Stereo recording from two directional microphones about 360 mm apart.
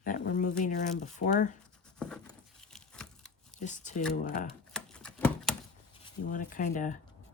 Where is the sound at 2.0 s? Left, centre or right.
Centre.